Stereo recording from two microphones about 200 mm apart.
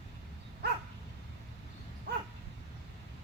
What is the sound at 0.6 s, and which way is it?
Dog, 55° right (ahead or behind).